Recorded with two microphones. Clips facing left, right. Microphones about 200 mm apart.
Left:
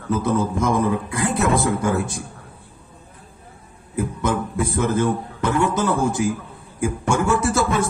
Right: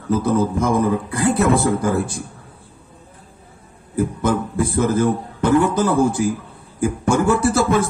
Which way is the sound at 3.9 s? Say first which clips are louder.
Right 3 dB; 30° right (ahead or behind).